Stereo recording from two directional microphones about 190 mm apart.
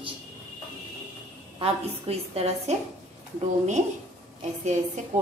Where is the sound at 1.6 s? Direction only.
30° right (ahead or behind).